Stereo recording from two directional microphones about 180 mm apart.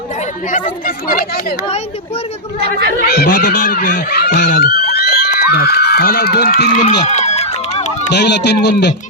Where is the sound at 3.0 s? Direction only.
60° left (ahead or behind).